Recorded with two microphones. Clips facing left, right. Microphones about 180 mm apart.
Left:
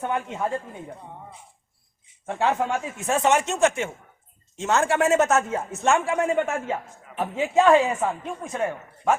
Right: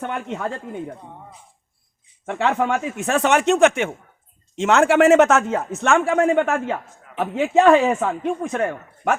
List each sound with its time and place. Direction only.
2.2 s a man's voice: 70° right (ahead or behind)